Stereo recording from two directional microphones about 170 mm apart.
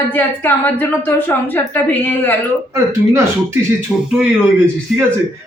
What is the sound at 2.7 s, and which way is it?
Speech, 15° right (ahead or behind).